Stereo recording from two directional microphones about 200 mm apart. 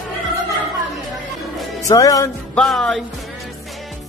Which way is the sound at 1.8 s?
15° left (ahead or behind).